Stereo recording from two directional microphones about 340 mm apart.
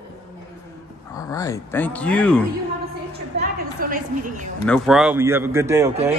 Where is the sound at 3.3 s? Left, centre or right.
Right.